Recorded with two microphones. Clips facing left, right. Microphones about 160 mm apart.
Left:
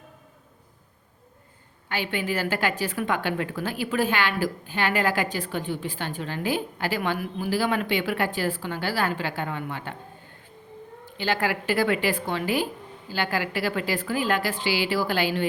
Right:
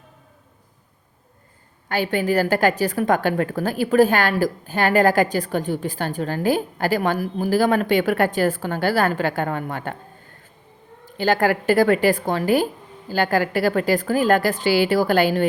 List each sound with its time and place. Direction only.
1.9 s a woman's voice: 40° right (ahead or behind)
11.0 s a woman's voice: 45° right (ahead or behind)